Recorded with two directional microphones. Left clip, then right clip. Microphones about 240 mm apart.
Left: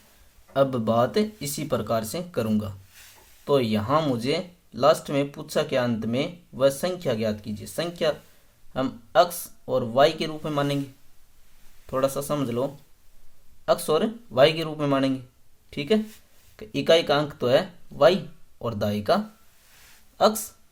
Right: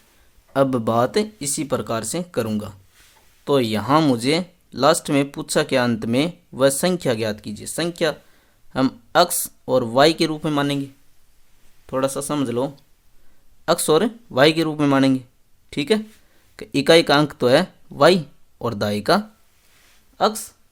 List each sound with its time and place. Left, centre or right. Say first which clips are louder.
0.5 s speech: right 3 dB; right
13.8 s speech: right 6 dB; right
20.1 s speech: right 1 dB; right